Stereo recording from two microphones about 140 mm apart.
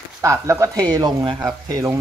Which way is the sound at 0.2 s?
20° right (ahead or behind).